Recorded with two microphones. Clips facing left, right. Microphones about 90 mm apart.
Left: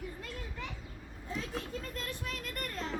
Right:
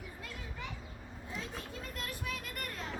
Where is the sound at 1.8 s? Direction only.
10° right (ahead or behind).